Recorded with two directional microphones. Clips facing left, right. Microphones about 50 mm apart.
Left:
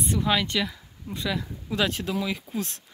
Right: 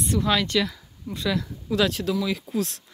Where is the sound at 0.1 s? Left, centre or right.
Centre.